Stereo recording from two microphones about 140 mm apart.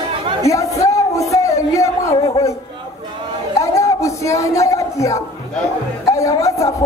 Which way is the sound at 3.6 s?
20° left (ahead or behind).